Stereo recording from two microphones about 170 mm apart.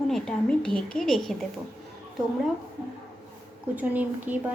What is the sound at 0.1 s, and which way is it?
A woman's voice, 5° left (ahead or behind).